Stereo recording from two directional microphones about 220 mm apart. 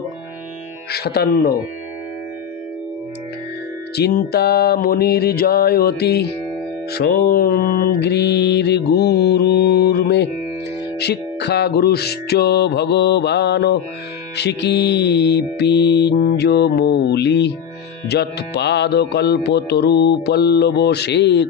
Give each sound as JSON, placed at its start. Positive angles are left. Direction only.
{"t": 0.9, "sound": "music", "side_deg": 45}
{"t": 3.9, "sound": "music", "side_deg": 45}